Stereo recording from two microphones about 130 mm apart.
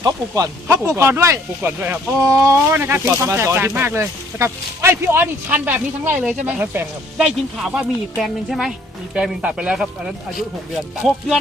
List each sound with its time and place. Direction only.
0.0 s a woman's voice: 30° right (ahead or behind); by 9.8 s 5° right (ahead or behind)